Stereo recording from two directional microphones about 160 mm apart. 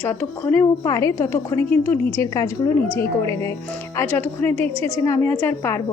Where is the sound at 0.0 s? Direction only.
15° left (ahead or behind).